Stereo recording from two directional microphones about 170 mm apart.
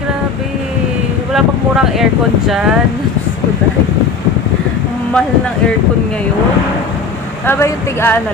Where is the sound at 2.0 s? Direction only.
5° right (ahead or behind).